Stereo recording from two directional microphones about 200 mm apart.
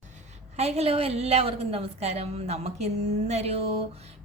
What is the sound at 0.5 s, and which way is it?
A woman's voice, 30° right (ahead or behind).